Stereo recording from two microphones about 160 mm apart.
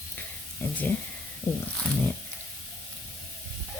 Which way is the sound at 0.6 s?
15° left (ahead or behind).